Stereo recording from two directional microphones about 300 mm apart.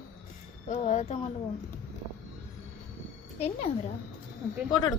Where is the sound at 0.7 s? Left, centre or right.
Left.